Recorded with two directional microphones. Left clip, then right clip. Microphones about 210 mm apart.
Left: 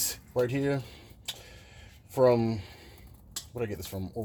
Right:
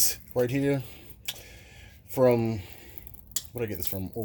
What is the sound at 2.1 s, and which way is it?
Speech, 50° right (ahead or behind).